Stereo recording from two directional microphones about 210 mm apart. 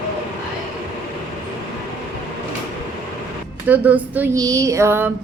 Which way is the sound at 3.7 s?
5° right (ahead or behind).